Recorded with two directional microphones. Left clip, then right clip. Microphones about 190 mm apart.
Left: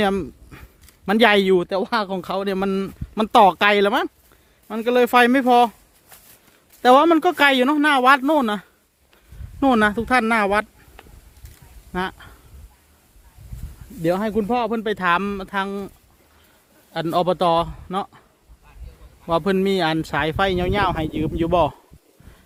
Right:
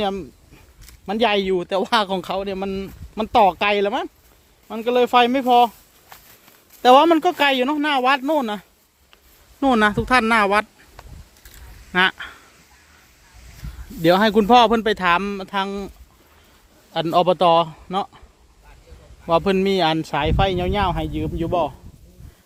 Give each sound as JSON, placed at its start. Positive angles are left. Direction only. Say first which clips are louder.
{"t": 0.0, "sound": "speech", "louder": "left 3 dB", "side_deg": 40}
{"t": 1.7, "sound": "speech", "louder": "right 3 dB", "side_deg": 10}
{"t": 2.3, "sound": "speech", "louder": "left 2 dB", "side_deg": 30}
{"t": 6.8, "sound": "speech", "louder": "right 1 dB", "side_deg": 10}
{"t": 9.6, "sound": "a man's voice", "louder": "even", "side_deg": 10}
{"t": 11.9, "sound": "speech", "louder": "right 9 dB", "side_deg": 5}
{"t": 14.0, "sound": "speech", "louder": "right 6 dB", "side_deg": -15}
{"t": 14.8, "sound": "speech", "louder": "right 2 dB", "side_deg": 5}
{"t": 16.9, "sound": "a man's voice", "louder": "right 3 dB", "side_deg": 0}
{"t": 19.2, "sound": "speech", "louder": "right 2 dB", "side_deg": 5}